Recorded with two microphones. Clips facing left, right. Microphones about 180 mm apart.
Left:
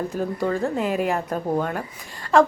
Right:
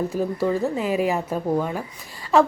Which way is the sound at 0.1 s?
5° right (ahead or behind).